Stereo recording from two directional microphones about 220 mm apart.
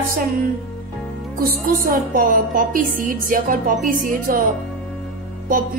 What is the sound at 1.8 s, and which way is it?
A woman's voice, 40° right (ahead or behind).